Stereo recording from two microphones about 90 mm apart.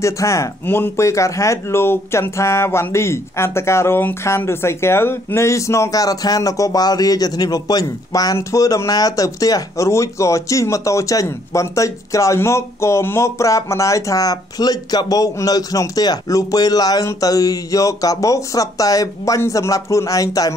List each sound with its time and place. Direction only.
0.0 s speech: 35° left (ahead or behind)